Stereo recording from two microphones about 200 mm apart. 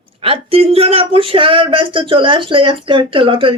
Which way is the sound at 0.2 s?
30° right (ahead or behind).